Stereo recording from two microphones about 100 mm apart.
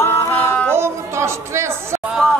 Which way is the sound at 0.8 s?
25° right (ahead or behind).